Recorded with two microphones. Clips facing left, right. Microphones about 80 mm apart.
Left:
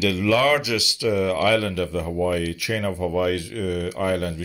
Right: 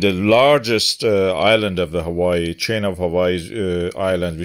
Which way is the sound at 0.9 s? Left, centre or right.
Right.